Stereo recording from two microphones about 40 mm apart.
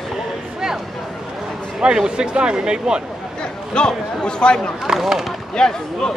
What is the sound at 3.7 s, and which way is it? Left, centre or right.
Speech, left.